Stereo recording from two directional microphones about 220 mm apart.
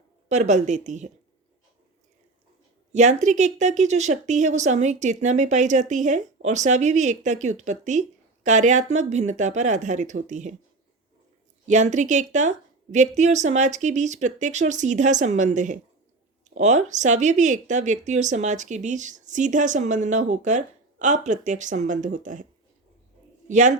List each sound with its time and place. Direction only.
0.3 s speech: 30° right (ahead or behind)
2.9 s speech: 35° right (ahead or behind)
11.7 s speech: 35° right (ahead or behind)
23.5 s speech: 35° right (ahead or behind)